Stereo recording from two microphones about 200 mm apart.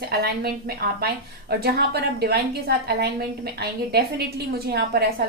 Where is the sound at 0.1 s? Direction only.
50° right (ahead or behind).